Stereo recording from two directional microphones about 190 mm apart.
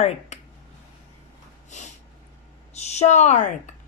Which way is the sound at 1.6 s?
40° left (ahead or behind).